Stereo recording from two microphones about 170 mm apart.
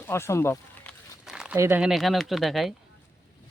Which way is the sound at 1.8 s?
Centre (ahead or behind).